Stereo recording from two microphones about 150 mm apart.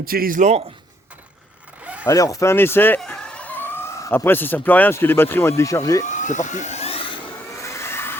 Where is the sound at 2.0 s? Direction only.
20° left (ahead or behind).